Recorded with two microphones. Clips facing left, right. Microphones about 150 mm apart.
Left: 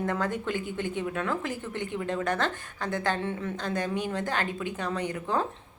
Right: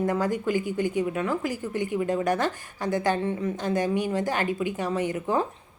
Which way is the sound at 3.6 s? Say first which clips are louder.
Right 5 dB; 15° right (ahead or behind).